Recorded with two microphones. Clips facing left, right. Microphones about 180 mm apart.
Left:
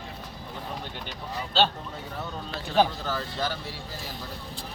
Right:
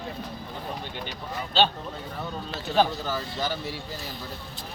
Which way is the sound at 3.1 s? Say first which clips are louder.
Right 1 dB; 5° right (ahead or behind).